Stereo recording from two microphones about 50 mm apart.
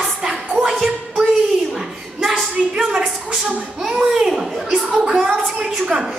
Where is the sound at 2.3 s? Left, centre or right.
Centre.